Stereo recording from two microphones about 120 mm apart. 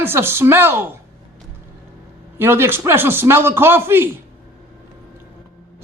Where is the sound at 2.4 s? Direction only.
20° right (ahead or behind).